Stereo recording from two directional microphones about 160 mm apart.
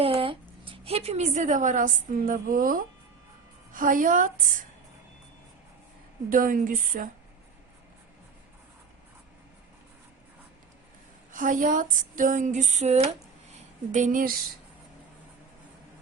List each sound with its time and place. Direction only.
0.0 s a woman's voice: 35° right (ahead or behind); by 4.3 s 55° right (ahead or behind)
6.3 s speech: 60° right (ahead or behind)
11.3 s speech: 55° right (ahead or behind)